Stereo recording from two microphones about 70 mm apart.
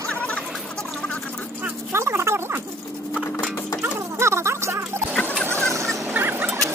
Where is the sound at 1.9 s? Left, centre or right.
Right.